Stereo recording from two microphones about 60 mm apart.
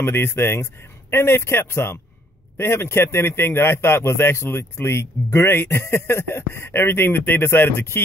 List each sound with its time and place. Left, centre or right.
0.0 s a man's voice: left